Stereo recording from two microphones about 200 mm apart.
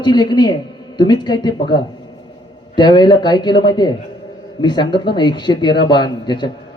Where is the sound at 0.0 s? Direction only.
20° left (ahead or behind).